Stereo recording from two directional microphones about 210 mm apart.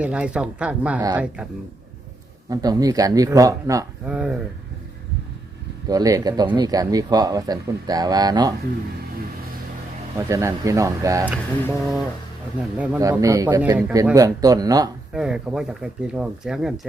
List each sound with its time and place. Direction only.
0.0 s speech: 5° right (ahead or behind)
2.5 s speech: 15° right (ahead or behind)
5.9 s speech: 15° right (ahead or behind)
10.2 s speech: 15° right (ahead or behind)
11.7 s speech: 5° right (ahead or behind)
13.0 s speech: 15° right (ahead or behind)
15.1 s speech: 5° right (ahead or behind)